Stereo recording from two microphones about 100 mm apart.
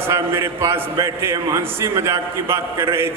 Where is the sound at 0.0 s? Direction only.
25° right (ahead or behind).